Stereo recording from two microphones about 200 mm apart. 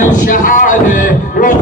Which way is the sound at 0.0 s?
40° left (ahead or behind).